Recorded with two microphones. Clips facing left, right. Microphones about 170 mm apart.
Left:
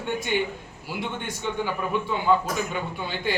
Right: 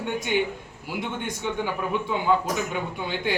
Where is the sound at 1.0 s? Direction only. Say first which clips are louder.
Even; 15° right (ahead or behind).